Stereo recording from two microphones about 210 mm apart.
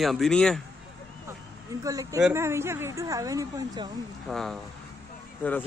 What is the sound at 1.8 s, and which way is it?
Speech, 15° right (ahead or behind).